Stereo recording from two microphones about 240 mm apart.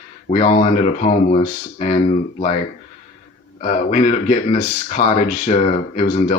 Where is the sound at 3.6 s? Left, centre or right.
Left.